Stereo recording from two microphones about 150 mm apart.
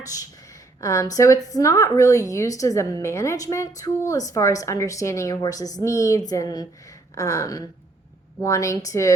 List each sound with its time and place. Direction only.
0.8 s a woman's voice: 20° left (ahead or behind)